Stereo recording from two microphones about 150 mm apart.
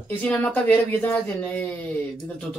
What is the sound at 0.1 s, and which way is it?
Speech, 10° left (ahead or behind).